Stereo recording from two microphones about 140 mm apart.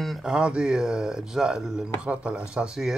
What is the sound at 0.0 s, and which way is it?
Speech, centre (ahead or behind).